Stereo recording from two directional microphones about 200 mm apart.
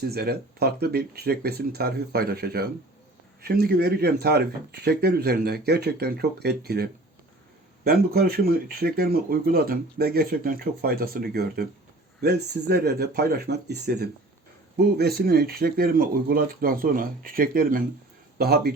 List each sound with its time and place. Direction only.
0.0 s speech: 50° right (ahead or behind)